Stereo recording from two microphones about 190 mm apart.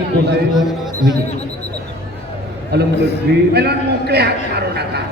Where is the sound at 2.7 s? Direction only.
60° right (ahead or behind).